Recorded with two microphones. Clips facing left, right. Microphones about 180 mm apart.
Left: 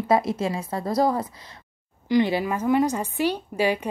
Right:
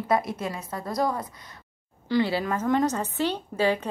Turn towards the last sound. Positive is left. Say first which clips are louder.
# left 1 dB
turn(degrees=10)  # may be behind; listen again after turning